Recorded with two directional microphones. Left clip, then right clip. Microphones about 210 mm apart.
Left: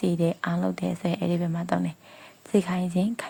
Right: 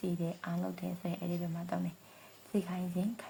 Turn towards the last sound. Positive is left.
turn(degrees=40)  # may be behind; listen again after turning